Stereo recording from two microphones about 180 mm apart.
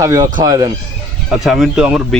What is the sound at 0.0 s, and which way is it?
Speech, 20° right (ahead or behind).